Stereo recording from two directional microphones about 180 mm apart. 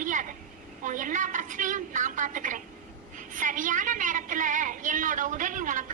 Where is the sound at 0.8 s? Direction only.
45° right (ahead or behind).